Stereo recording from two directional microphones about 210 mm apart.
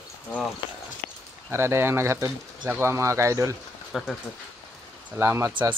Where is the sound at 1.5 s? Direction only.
10° right (ahead or behind).